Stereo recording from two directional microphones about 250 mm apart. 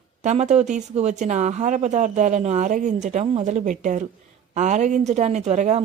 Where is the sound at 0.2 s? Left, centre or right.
Right.